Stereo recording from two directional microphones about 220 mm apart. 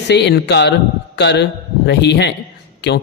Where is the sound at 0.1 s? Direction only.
50° left (ahead or behind).